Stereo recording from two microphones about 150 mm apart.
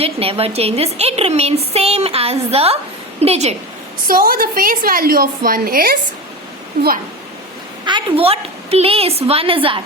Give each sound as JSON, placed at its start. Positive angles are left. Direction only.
{"t": 0.0, "sound": "a woman's voice", "side_deg": -40}
{"t": 4.0, "sound": "a woman's voice", "side_deg": -75}
{"t": 7.9, "sound": "a woman's voice", "side_deg": -35}